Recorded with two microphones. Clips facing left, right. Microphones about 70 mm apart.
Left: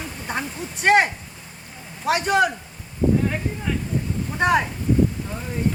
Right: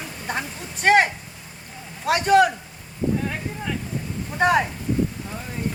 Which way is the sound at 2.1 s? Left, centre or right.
Centre.